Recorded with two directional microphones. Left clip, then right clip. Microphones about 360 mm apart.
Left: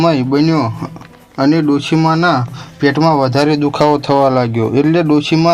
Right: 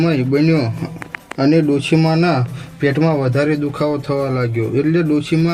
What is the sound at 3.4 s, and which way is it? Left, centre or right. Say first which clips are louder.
Speech: left 6 dB; left.